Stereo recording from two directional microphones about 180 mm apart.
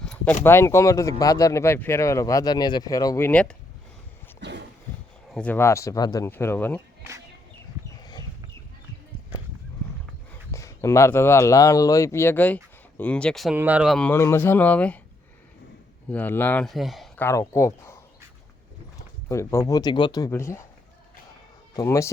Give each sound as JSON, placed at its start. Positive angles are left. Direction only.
{"t": 0.0, "sound": "a sound", "side_deg": 5}
{"t": 0.4, "sound": "speech", "side_deg": 15}
{"t": 4.4, "sound": "a sound", "side_deg": -70}
{"t": 5.3, "sound": "speech", "side_deg": 10}
{"t": 10.5, "sound": "speech", "side_deg": 15}
{"t": 14.1, "sound": "speech", "side_deg": 15}
{"t": 16.1, "sound": "speech", "side_deg": 10}
{"t": 17.2, "sound": "speech", "side_deg": 15}
{"t": 21.8, "sound": "speech", "side_deg": 15}